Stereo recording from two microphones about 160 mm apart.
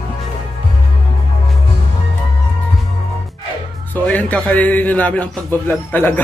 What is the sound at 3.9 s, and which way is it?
A man's voice, 10° left (ahead or behind).